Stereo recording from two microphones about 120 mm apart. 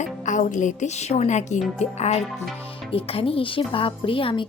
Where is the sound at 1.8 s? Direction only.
65° left (ahead or behind).